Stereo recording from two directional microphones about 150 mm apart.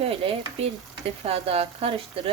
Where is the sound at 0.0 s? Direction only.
40° right (ahead or behind).